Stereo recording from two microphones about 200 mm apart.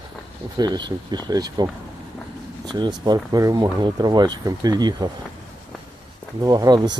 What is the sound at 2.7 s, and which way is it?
Speech, 20° right (ahead or behind).